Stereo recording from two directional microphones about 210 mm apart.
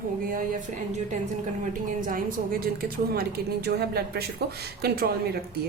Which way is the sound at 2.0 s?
40° right (ahead or behind).